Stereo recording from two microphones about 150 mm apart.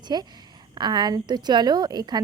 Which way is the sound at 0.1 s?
25° right (ahead or behind).